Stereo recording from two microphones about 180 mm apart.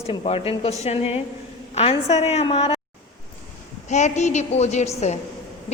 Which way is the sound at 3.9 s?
40° left (ahead or behind).